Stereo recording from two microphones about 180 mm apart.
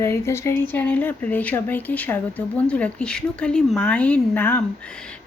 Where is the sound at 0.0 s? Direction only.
15° left (ahead or behind).